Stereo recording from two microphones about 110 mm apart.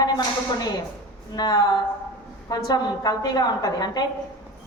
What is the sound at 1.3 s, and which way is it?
A woman's voice, 40° left (ahead or behind).